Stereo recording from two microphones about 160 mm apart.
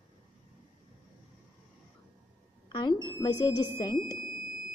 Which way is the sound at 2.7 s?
30° left (ahead or behind).